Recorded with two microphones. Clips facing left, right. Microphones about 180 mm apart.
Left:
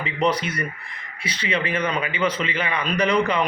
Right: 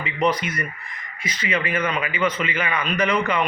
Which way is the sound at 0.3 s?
30° left (ahead or behind).